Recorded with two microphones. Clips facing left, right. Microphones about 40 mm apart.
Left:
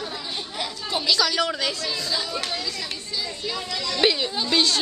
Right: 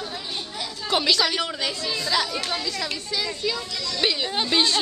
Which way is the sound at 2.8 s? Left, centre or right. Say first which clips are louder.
Right 3 dB; right.